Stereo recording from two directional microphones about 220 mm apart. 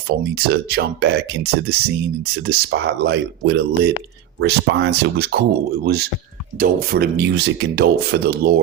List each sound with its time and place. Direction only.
0.3 s speech: 45° right (ahead or behind)
2.2 s speech: 45° right (ahead or behind)